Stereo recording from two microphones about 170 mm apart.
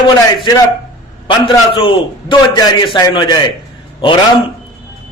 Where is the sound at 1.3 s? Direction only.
30° left (ahead or behind).